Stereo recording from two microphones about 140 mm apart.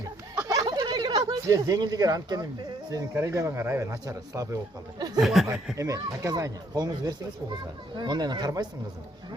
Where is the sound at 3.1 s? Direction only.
20° right (ahead or behind).